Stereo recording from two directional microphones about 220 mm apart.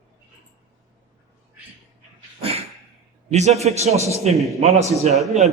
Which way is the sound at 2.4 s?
25° right (ahead or behind).